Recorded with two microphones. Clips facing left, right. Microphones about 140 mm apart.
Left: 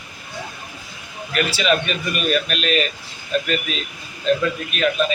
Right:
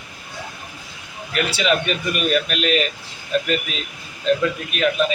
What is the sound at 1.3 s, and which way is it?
Speech, 20° right (ahead or behind).